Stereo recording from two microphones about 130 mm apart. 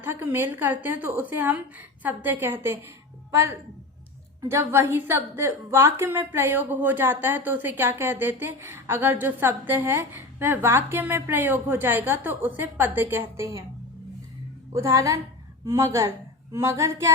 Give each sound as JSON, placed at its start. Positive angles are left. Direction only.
{"t": 0.0, "sound": "a woman's voice", "side_deg": -15}
{"t": 4.4, "sound": "a woman's voice", "side_deg": -20}
{"t": 14.7, "sound": "speech", "side_deg": -20}